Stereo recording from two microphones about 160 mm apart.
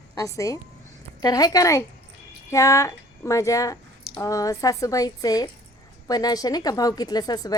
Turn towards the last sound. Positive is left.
turn(degrees=25)  # may be behind; listen again after turning